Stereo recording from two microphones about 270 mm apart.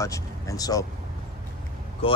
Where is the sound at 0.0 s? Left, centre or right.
Centre.